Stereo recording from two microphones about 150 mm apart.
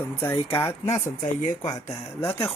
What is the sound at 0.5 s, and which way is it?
Speech, 15° left (ahead or behind).